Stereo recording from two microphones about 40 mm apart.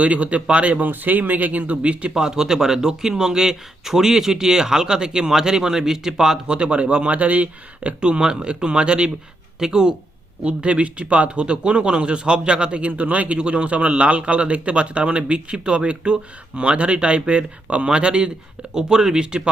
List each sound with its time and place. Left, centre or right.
0.0 s speech: right
2.1 s speech: centre; by 8.2 s right
8.2 s speech: right
10.4 s speech: right